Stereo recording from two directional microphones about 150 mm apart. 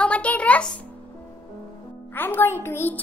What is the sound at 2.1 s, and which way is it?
Speech, 15° left (ahead or behind).